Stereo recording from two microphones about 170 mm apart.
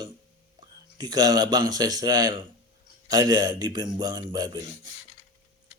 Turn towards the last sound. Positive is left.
turn(degrees=-25)  # may be behind; listen again after turning